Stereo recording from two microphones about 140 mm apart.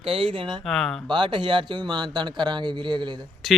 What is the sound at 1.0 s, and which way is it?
A man's voice, 35° right (ahead or behind).